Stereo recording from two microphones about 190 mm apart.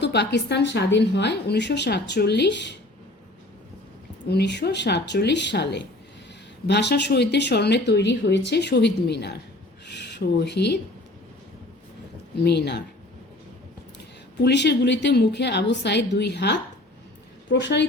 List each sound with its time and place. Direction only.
0.0 s speech: 60° left (ahead or behind)
4.3 s speech: 60° left (ahead or behind)
12.5 s speech: 60° left (ahead or behind)
14.4 s speech: 65° left (ahead or behind)